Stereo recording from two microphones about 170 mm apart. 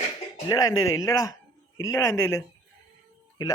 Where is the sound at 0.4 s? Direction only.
20° left (ahead or behind).